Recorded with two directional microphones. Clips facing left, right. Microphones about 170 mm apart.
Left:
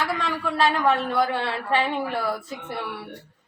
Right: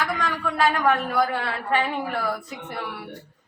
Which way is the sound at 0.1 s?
30° left (ahead or behind).